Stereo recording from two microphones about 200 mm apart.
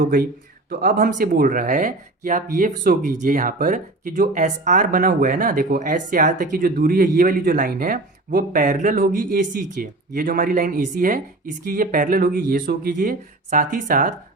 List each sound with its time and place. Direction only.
0.0 s speech: 45° right (ahead or behind)